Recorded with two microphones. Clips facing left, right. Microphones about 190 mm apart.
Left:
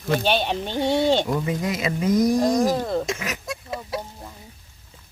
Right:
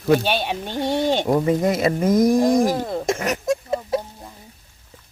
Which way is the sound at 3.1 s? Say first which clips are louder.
Right 8 dB; 50° right (ahead or behind).